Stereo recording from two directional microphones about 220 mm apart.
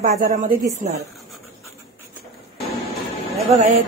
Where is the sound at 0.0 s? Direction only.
35° right (ahead or behind).